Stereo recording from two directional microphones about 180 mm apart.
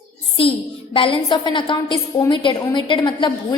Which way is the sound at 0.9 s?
30° left (ahead or behind).